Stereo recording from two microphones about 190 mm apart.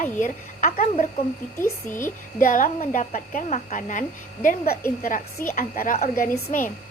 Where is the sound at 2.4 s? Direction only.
45° left (ahead or behind).